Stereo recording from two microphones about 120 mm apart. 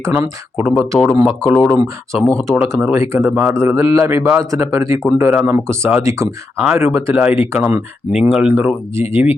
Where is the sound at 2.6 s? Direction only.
20° right (ahead or behind); by 8.4 s 5° right (ahead or behind).